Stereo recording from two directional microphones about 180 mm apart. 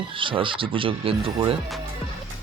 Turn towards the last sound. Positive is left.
turn(degrees=-30)  # may be behind; listen again after turning